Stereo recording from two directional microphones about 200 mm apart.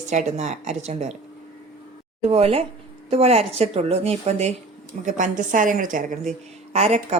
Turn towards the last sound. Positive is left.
turn(degrees=-30)  # may be behind; listen again after turning